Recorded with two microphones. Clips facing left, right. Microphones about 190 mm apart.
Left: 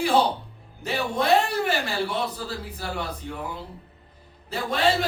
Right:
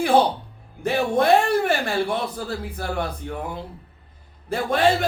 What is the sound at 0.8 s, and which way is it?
Speech, 55° right (ahead or behind).